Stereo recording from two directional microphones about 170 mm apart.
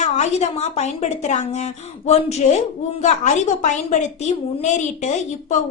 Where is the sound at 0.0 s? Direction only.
40° left (ahead or behind).